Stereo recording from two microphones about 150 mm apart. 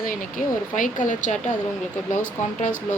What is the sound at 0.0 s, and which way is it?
Speech, 65° left (ahead or behind).